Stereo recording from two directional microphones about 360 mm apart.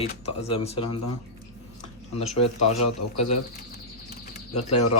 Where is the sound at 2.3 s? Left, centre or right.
Centre.